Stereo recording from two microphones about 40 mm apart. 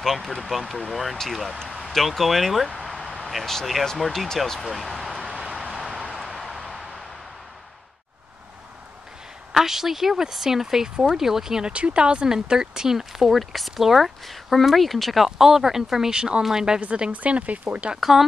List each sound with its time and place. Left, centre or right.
0.0 s speech: centre
2.8 s a sound: centre
3.3 s speech: centre
4.9 s a sound: centre
5.4 s vehicle: centre
5.8 s a sound: centre
9.5 s speech: centre
11.6 s speech: right
12.3 s speech: centre
16.2 s speech: right
17.1 s speech: right